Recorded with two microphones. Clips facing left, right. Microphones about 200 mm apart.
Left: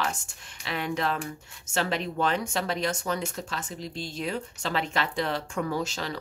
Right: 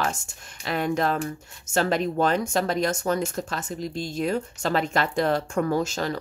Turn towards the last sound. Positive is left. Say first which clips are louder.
# right 6 dB
turn(degrees=-45)  # may be behind; listen again after turning